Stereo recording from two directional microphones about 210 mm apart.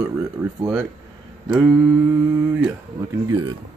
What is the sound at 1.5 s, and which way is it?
Speech, 5° right (ahead or behind).